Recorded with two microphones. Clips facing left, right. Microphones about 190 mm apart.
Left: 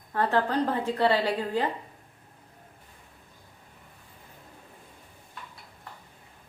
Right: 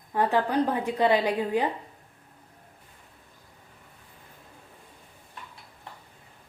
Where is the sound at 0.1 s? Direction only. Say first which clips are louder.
Right 1 dB; 15° right (ahead or behind).